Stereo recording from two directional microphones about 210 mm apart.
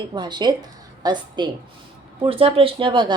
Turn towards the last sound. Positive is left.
turn(degrees=-20)  # may be behind; listen again after turning